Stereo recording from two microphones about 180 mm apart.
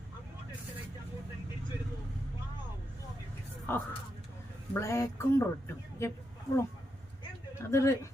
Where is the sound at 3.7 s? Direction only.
10° left (ahead or behind).